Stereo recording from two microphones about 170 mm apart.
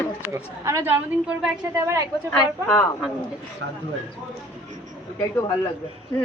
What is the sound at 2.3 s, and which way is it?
Speech, 15° left (ahead or behind).